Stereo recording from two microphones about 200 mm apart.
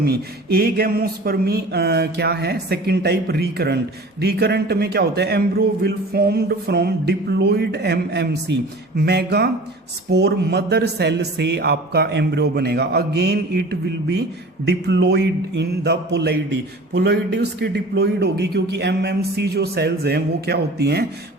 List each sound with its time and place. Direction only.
0.0 s speech: 50° right (ahead or behind)